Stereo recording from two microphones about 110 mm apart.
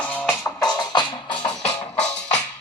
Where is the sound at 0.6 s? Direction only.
40° left (ahead or behind).